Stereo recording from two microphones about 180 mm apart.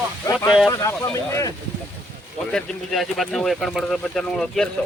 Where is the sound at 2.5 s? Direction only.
Centre (ahead or behind).